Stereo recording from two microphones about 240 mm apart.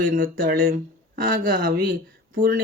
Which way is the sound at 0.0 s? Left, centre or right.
Right.